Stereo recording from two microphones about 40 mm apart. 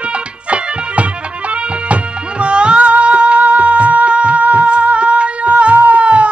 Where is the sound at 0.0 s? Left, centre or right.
Right.